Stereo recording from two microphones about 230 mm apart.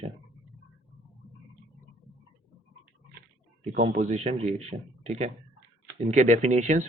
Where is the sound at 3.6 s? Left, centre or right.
Right.